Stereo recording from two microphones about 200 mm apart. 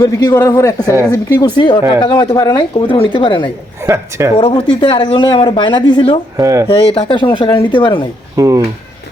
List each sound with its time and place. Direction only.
0.0 s a man's voice: 20° left (ahead or behind)
3.8 s speech: 10° right (ahead or behind)
4.4 s speech: 25° left (ahead or behind)
6.3 s speech: 15° right (ahead or behind)
6.7 s speech: 25° left (ahead or behind)
8.4 s speech: 15° right (ahead or behind)